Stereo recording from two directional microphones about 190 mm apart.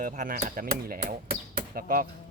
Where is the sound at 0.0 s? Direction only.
45° right (ahead or behind).